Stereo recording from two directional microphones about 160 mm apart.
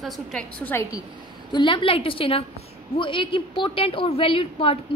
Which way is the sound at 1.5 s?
30° left (ahead or behind).